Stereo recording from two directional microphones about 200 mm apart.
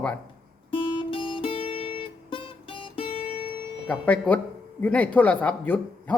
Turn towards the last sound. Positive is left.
turn(degrees=10)  # may be behind; listen again after turning